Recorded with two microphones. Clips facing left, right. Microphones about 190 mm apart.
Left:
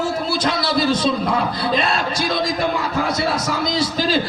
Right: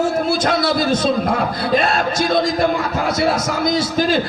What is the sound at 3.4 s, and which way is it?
Speech, 50° right (ahead or behind).